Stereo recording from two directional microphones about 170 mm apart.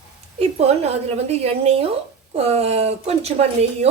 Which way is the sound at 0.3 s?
40° right (ahead or behind).